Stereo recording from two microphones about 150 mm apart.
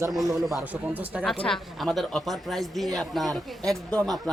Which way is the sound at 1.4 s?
5° left (ahead or behind).